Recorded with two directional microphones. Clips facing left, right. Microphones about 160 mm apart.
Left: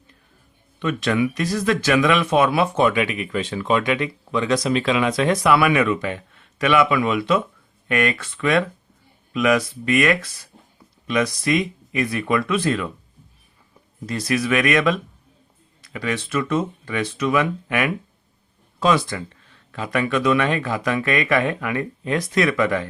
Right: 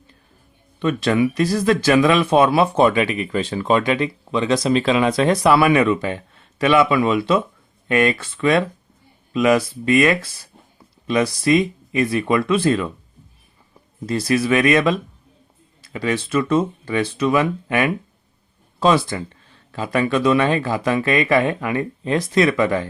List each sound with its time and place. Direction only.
0.8 s speech: 35° right (ahead or behind)
14.1 s speech: 30° right (ahead or behind)